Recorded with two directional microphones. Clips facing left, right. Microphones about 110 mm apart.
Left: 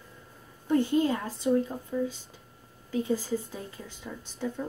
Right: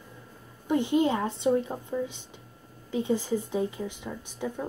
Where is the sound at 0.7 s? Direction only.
20° right (ahead or behind).